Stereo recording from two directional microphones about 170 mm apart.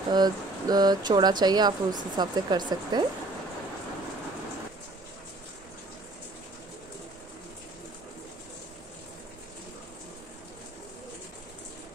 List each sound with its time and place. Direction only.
0.1 s speech: 25° right (ahead or behind)